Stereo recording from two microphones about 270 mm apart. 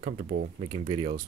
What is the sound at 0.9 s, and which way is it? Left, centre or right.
Speech, right.